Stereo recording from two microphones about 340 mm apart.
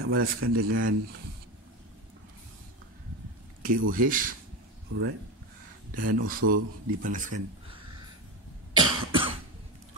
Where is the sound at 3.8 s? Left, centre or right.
Right.